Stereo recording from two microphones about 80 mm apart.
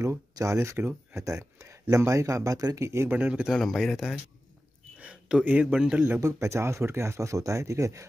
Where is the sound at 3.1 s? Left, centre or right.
Centre.